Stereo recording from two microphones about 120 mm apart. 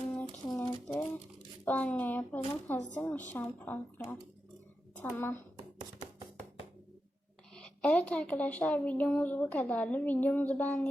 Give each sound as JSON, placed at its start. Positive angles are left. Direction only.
{"t": 0.4, "sound": "a sound", "side_deg": 30}
{"t": 1.6, "sound": "a woman's voice", "side_deg": 10}
{"t": 7.5, "sound": "a woman's voice", "side_deg": 10}